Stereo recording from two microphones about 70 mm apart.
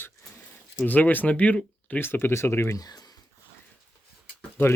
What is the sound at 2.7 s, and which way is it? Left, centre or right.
Speech, left.